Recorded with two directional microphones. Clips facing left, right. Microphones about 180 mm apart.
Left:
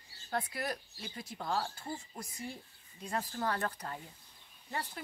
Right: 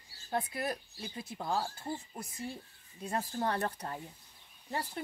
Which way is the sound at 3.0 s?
25° right (ahead or behind).